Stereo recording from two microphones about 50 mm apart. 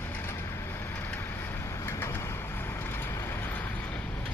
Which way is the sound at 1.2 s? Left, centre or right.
Left.